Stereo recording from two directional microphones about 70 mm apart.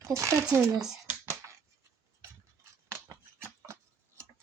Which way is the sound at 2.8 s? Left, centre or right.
Right.